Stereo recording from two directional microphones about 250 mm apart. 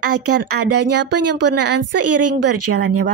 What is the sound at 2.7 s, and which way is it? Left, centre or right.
Speech, right.